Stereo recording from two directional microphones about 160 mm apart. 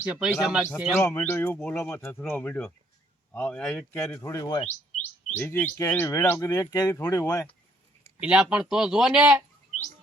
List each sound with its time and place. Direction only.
0.0 s speech: 5° right (ahead or behind)
0.9 s speech: 15° left (ahead or behind)
4.2 s speech: 20° left (ahead or behind)
5.4 s speech: 15° left (ahead or behind)
8.2 s speech: 5° right (ahead or behind)